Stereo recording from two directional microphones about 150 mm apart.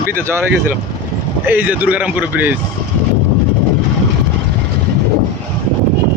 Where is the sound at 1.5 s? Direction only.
10° right (ahead or behind).